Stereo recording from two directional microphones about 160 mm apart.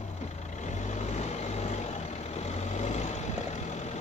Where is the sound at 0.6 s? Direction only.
45° left (ahead or behind).